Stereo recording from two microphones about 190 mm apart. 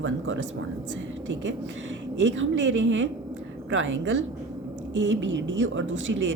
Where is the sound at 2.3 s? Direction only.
90° right.